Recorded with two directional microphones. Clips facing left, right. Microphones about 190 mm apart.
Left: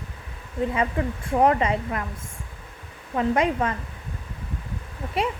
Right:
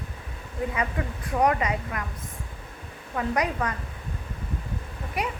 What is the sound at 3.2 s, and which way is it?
Speech, 25° left (ahead or behind).